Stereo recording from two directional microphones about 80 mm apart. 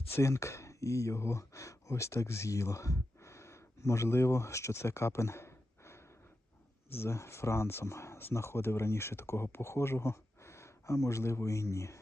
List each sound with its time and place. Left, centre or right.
0.1 s speech: left